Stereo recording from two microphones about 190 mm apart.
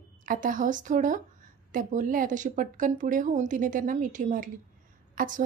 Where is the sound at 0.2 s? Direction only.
45° right (ahead or behind).